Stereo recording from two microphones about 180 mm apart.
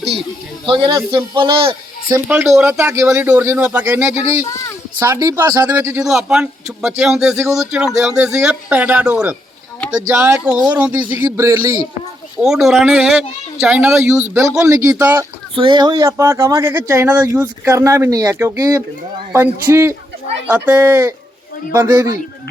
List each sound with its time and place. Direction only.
0.6 s a man's voice: 25° right (ahead or behind)
2.1 s a man's voice: 5° right (ahead or behind)
12.4 s a man's voice: 5° right (ahead or behind)
15.5 s speech: 25° right (ahead or behind); by 22.1 s 10° right (ahead or behind)